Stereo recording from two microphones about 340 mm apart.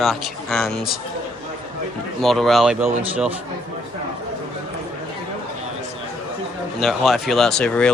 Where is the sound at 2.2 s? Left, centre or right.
Centre.